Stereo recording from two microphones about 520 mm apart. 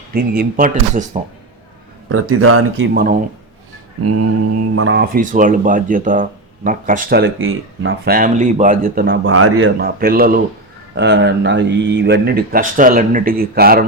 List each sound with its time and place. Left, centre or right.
0.1 s speech: centre
2.0 s speech: right
4.0 s speech: right